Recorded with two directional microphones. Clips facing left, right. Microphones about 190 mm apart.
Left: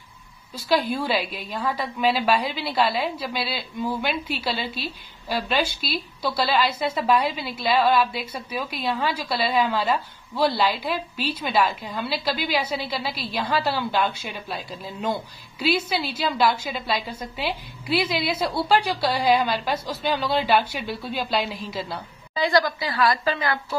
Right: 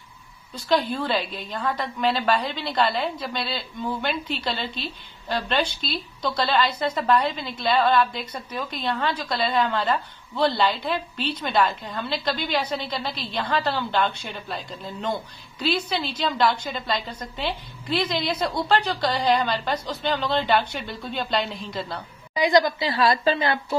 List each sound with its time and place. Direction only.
0.6 s a woman's voice: 5° left (ahead or behind)
22.3 s a woman's voice: 15° right (ahead or behind)